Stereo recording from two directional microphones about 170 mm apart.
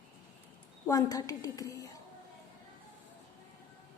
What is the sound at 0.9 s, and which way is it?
A woman's voice, 20° left (ahead or behind).